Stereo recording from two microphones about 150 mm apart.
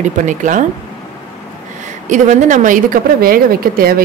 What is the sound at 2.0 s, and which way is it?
A woman's voice, 55° right (ahead or behind).